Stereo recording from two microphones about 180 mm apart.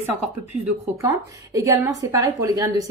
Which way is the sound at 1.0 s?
15° right (ahead or behind).